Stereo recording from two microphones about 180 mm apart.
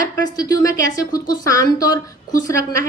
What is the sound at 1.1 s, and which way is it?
Speech, 55° left (ahead or behind).